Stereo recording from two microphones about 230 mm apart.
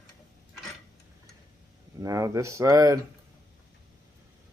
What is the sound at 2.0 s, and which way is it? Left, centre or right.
Speech, centre.